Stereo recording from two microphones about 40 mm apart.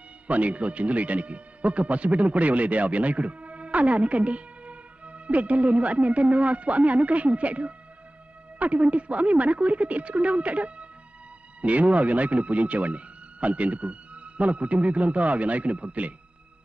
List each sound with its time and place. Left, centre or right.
0.3 s speech: right